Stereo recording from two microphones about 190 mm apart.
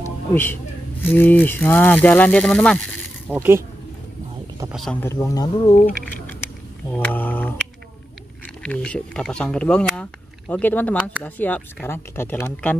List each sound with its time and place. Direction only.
0.3 s speech: 10° left (ahead or behind)
3.3 s speech: 15° right (ahead or behind)
5.0 s speech: 15° left (ahead or behind)
6.9 s mantra: 10° left (ahead or behind)
8.6 s speech: 5° left (ahead or behind)